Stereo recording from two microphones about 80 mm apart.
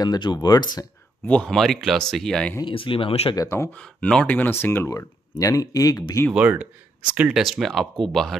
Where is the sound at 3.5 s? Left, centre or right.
Left.